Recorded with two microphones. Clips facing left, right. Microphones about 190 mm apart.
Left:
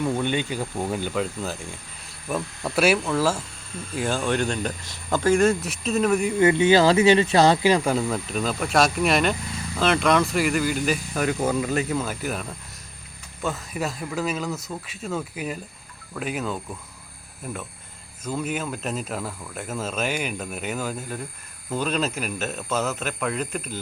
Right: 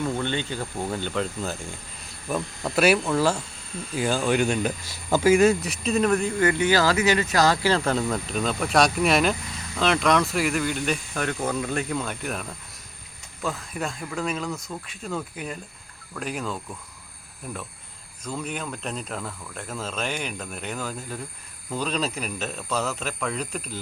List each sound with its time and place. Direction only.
0.0 s speech: 15° left (ahead or behind)
6.4 s speech: 20° left (ahead or behind); by 23.8 s centre (ahead or behind)